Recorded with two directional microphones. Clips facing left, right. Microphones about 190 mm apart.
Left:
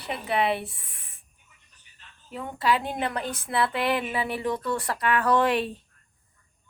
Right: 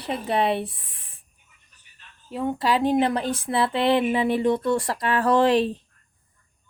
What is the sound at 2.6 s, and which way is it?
Speech, 35° right (ahead or behind).